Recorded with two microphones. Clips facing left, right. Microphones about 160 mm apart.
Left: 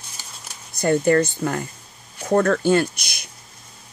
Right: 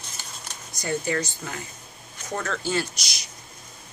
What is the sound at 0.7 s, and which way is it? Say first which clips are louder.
Speech: left 10 dB; 55° left (ahead or behind).